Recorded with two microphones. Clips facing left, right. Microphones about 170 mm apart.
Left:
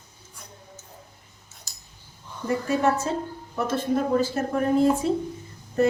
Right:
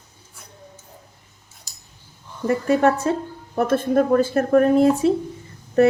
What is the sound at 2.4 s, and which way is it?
Speech, 60° right (ahead or behind).